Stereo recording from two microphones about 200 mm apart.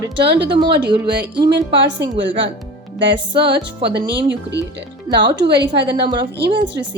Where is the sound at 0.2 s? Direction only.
60° right (ahead or behind).